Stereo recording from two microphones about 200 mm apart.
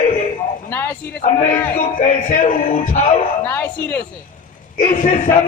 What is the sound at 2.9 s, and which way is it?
Speech, 40° left (ahead or behind).